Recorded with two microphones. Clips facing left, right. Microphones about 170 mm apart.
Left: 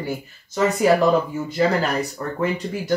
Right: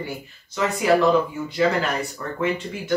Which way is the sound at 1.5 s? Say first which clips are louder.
Left 2 dB; 40° left (ahead or behind).